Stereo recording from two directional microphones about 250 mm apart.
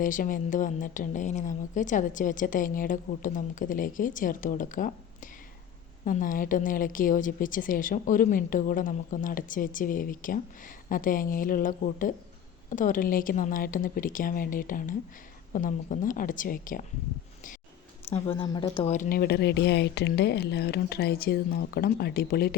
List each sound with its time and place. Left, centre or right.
0.0 s a woman's voice: left
18.1 s speech: left
18.9 s a woman's voice: left